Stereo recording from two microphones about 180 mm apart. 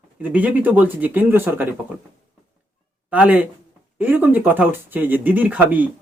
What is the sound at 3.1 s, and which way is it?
A man's voice, 10° right (ahead or behind).